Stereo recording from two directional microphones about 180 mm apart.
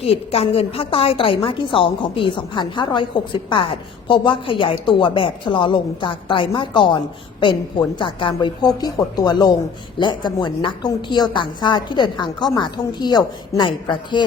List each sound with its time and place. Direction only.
0.0 s a woman's voice: 35° left (ahead or behind)